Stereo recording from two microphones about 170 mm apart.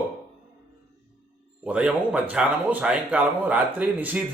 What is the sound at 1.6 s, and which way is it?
Speech, 5° right (ahead or behind).